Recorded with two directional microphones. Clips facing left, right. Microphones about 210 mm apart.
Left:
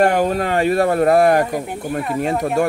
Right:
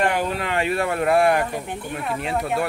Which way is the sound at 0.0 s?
45° left (ahead or behind).